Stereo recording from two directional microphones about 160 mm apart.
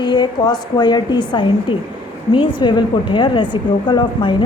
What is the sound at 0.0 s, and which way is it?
A woman's voice, 25° left (ahead or behind).